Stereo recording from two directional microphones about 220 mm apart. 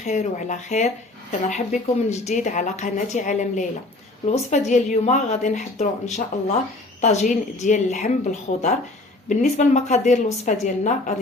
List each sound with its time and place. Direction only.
0.0 s speech: 30° left (ahead or behind)